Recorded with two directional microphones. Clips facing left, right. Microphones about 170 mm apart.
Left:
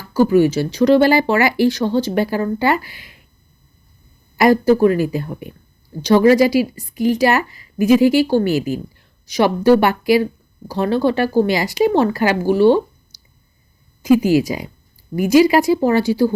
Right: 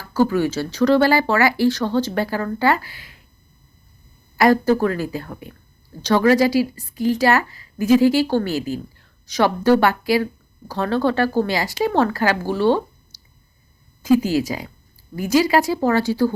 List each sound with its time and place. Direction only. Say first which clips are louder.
0.1 s speech: left 5 dB; 15° left (ahead or behind)
4.4 s speech: left 3 dB; 15° left (ahead or behind)